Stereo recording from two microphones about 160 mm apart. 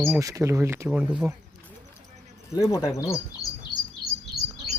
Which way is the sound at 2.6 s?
20° left (ahead or behind).